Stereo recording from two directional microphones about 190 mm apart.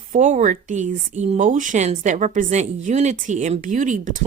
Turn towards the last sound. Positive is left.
turn(degrees=-40)  # may be behind; listen again after turning